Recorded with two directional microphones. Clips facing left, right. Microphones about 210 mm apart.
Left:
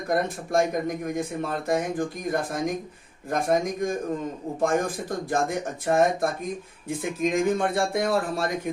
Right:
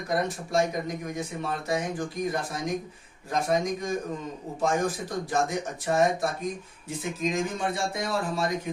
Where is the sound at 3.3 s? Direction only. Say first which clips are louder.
Left 2 dB; 55° left (ahead or behind).